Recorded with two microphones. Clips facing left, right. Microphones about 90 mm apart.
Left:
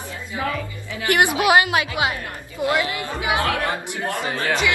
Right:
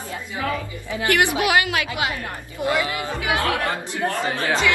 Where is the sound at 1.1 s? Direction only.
25° left (ahead or behind).